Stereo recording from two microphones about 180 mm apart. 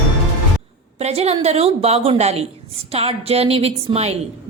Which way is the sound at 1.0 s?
35° right (ahead or behind).